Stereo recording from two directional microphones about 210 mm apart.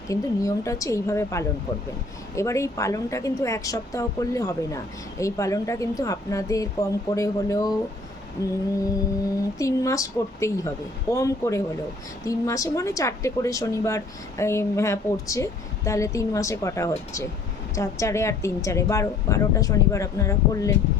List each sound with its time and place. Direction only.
0.1 s a woman's voice: 15° left (ahead or behind)
9.6 s a woman's voice: 15° left (ahead or behind)